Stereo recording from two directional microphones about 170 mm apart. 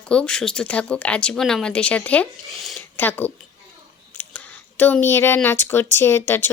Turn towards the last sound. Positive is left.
turn(degrees=15)  # may be behind; listen again after turning